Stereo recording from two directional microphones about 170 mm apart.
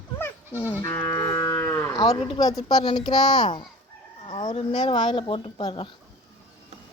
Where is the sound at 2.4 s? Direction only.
20° left (ahead or behind).